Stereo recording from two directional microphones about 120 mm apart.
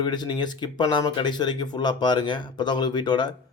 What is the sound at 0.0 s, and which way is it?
Speech, 35° left (ahead or behind).